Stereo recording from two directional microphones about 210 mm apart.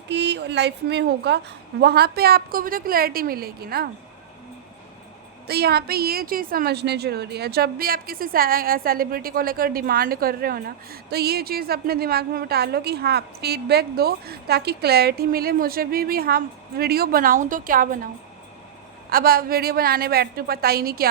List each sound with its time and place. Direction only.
0.1 s a woman's voice: 55° right (ahead or behind)
5.5 s a woman's voice: 50° right (ahead or behind)
19.1 s a woman's voice: 45° right (ahead or behind)